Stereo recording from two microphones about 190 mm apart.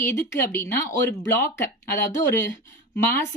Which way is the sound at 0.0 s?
10° left (ahead or behind).